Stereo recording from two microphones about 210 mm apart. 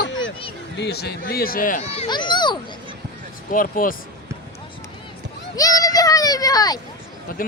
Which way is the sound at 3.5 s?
40° left (ahead or behind).